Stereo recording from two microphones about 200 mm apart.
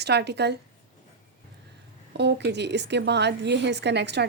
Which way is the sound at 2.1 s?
60° right (ahead or behind).